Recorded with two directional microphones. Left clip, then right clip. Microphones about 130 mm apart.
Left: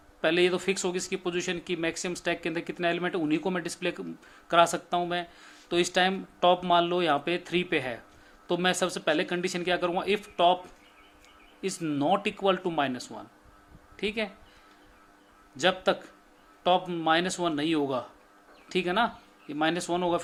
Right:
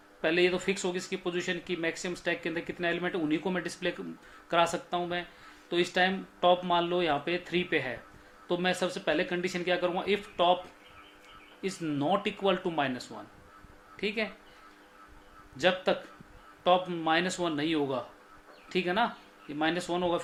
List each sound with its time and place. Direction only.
0.2 s speech: 50° left (ahead or behind)
11.6 s speech: 45° left (ahead or behind)
15.5 s speech: 40° left (ahead or behind)